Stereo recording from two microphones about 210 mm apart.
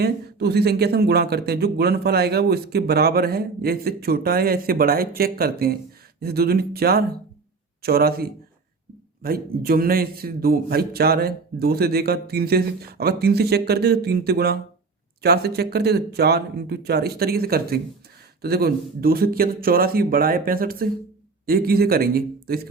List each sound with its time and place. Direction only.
0.0 s speech: 50° right (ahead or behind)